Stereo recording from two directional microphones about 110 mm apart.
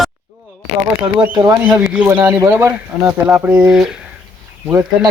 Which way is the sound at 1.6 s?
15° right (ahead or behind).